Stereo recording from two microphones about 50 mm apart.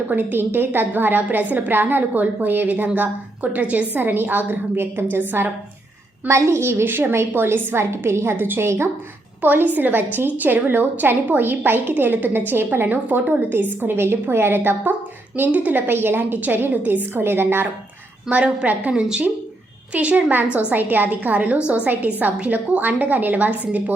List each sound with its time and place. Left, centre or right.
0.1 s a woman's voice: right
6.2 s a woman's voice: right
15.5 s a woman's voice: right
15.9 s a woman's voice: right
17.2 s a woman's voice: right
18.3 s a woman's voice: right
18.9 s a woman's voice: centre
20.7 s a woman's voice: right